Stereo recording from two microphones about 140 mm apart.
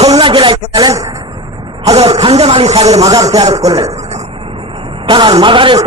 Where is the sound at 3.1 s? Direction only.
25° right (ahead or behind).